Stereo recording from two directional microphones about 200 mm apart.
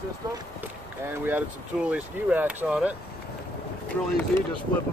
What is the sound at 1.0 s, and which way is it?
Speech, 10° right (ahead or behind).